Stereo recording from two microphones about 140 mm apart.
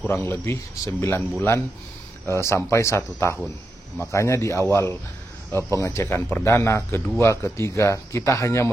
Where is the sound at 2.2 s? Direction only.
20° left (ahead or behind).